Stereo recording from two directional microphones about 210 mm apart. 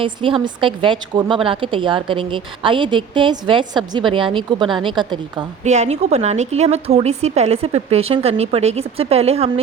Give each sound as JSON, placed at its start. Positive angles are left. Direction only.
{"t": 0.0, "sound": "a woman's voice", "side_deg": -25}
{"t": 5.6, "sound": "a woman's voice", "side_deg": -35}